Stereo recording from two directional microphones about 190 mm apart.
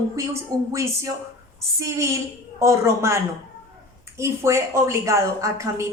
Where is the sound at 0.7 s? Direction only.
15° right (ahead or behind).